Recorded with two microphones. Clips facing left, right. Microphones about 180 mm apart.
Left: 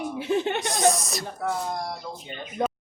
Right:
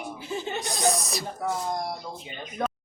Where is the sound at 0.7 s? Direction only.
Centre (ahead or behind).